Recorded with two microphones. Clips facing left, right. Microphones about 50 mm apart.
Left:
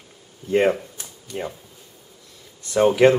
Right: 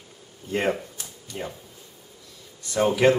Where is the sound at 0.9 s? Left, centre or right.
Centre.